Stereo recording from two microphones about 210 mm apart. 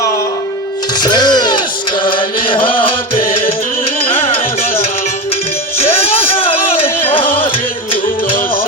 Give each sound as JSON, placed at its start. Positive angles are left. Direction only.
{"t": 0.9, "sound": "music", "side_deg": 20}
{"t": 5.7, "sound": "music", "side_deg": 30}